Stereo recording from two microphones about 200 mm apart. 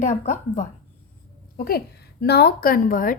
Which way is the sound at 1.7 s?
50° left (ahead or behind).